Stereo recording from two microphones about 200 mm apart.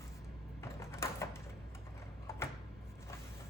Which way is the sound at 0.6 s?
15° left (ahead or behind).